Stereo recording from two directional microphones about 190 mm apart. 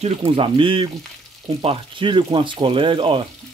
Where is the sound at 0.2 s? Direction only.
25° right (ahead or behind).